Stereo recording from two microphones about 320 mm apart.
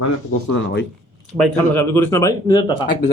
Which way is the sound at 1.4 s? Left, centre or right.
Centre.